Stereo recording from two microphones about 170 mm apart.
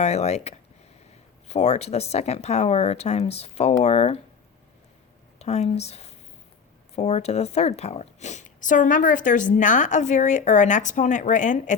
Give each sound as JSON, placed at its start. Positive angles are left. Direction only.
{"t": 0.0, "sound": "speech", "side_deg": 40}
{"t": 5.4, "sound": "a woman's voice", "side_deg": 40}